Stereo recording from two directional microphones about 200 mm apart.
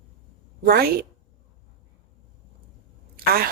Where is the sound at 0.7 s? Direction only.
50° right (ahead or behind).